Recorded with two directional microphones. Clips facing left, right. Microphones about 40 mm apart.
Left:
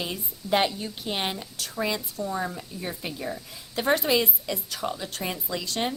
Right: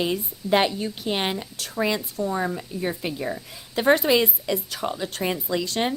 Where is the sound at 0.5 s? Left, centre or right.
Right.